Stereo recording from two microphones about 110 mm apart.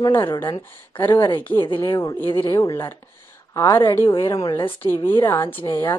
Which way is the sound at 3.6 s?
25° left (ahead or behind).